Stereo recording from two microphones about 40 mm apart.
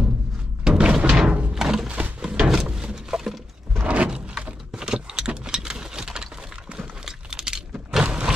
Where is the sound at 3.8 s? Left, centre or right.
Right.